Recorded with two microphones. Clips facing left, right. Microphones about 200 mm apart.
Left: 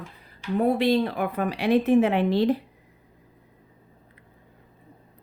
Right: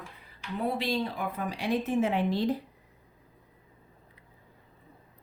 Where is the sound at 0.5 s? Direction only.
50° left (ahead or behind); by 2.6 s 65° left (ahead or behind).